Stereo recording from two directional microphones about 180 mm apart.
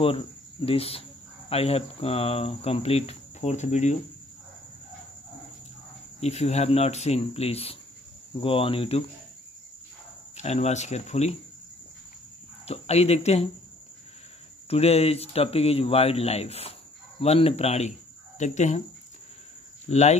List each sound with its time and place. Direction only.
0.0 s speech: 30° left (ahead or behind)
6.2 s speech: 35° left (ahead or behind)
10.3 s speech: 35° left (ahead or behind)
12.6 s speech: 35° left (ahead or behind)
14.7 s speech: 35° left (ahead or behind)
19.9 s speech: 40° left (ahead or behind)